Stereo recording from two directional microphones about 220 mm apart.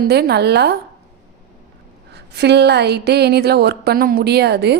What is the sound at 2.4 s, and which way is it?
A woman's voice, 50° right (ahead or behind).